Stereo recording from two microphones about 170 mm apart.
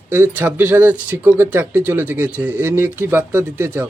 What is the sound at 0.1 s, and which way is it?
Speech, 10° right (ahead or behind).